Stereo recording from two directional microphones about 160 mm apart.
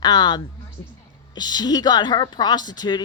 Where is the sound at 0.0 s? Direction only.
25° left (ahead or behind).